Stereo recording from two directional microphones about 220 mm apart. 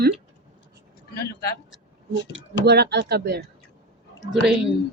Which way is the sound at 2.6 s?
50° right (ahead or behind).